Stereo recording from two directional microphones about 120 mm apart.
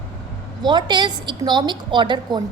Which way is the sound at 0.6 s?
40° right (ahead or behind).